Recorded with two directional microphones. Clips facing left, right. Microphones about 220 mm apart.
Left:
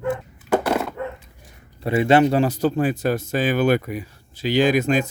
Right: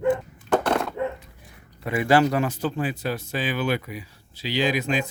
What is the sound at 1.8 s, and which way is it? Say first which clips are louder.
Speech: left 4 dB; 25° left (ahead or behind).